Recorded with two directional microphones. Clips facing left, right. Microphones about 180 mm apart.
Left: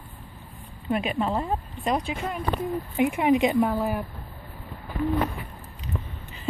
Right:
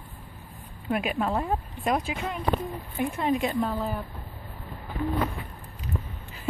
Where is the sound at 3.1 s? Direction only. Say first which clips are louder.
Left 5 dB; 15° left (ahead or behind).